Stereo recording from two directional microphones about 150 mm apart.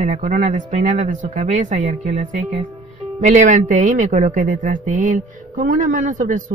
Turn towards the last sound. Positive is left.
turn(degrees=-60)  # may be behind; listen again after turning